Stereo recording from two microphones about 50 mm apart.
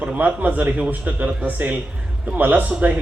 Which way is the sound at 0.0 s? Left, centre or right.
Right.